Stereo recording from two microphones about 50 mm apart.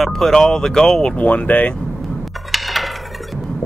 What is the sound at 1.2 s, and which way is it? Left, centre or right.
Speech, left.